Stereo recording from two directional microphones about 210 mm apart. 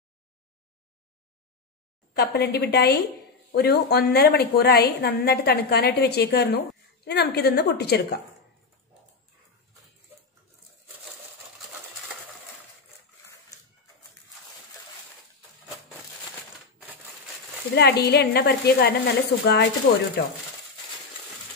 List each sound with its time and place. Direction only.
2.1 s a woman's voice: 50° left (ahead or behind)
17.7 s a woman's voice: 50° left (ahead or behind)